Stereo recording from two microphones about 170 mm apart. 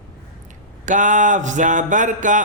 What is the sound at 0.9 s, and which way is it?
Speech, 50° right (ahead or behind).